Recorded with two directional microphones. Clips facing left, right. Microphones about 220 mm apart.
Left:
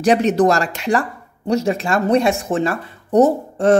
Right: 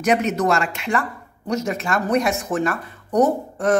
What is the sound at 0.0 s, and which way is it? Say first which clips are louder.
Speech: left 5 dB; 30° left (ahead or behind).